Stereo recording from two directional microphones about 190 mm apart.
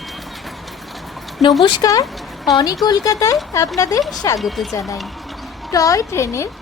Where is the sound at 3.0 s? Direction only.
15° left (ahead or behind).